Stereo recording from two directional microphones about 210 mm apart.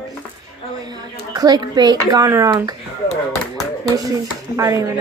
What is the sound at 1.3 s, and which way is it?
Speech, 20° right (ahead or behind).